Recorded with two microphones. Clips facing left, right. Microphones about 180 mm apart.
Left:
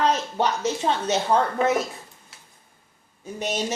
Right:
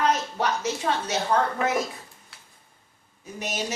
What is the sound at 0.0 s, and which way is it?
A woman's voice, 30° left (ahead or behind).